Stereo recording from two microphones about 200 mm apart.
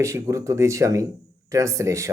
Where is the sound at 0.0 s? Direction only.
15° right (ahead or behind).